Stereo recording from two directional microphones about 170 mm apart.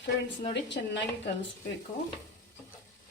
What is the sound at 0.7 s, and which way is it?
Speech, 85° left.